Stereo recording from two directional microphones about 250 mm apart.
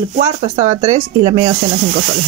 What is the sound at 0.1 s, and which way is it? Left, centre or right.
Speech, right.